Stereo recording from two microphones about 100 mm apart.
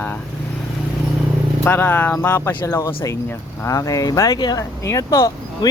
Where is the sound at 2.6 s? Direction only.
35° left (ahead or behind).